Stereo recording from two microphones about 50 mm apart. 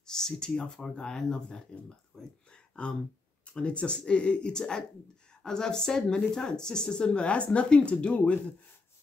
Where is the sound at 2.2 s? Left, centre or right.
Centre.